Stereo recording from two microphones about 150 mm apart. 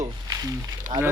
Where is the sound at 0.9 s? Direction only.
30° right (ahead or behind).